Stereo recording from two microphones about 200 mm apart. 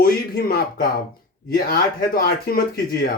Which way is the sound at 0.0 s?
50° left (ahead or behind).